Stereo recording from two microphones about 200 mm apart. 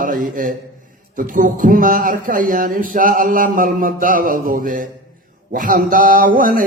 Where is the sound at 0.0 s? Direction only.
45° right (ahead or behind).